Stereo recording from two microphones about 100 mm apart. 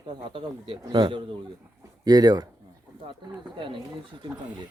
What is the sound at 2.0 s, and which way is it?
Speech, 40° right (ahead or behind).